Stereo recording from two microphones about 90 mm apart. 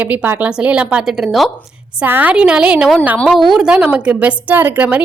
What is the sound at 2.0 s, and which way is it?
Speech, 20° right (ahead or behind).